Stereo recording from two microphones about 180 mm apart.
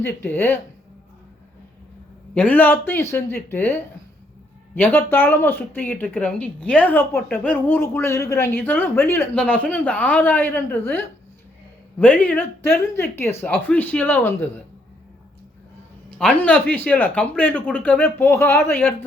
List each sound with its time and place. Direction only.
0.0 s speech: 10° left (ahead or behind)
2.3 s speech: 10° left (ahead or behind)
16.0 s speech: 5° left (ahead or behind)